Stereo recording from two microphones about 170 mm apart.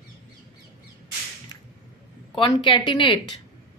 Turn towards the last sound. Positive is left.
turn(degrees=30)  # may be behind; listen again after turning